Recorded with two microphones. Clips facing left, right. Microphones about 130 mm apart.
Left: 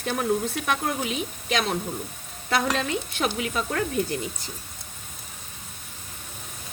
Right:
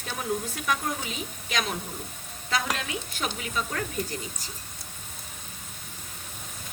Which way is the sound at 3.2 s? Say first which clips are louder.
Left 4 dB; 50° left (ahead or behind).